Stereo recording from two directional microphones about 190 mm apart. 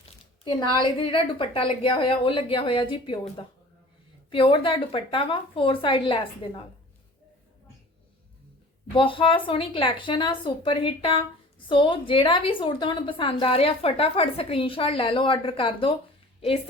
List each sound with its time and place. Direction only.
0.4 s a woman's voice: 25° left (ahead or behind)
9.0 s a woman's voice: 25° left (ahead or behind)